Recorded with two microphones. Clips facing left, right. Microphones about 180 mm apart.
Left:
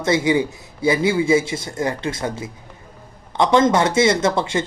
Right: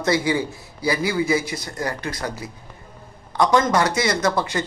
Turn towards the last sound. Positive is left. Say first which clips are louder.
# left 2 dB
turn(degrees=25)  # may be behind; listen again after turning